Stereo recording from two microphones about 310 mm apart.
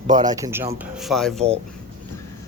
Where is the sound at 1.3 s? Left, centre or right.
Centre.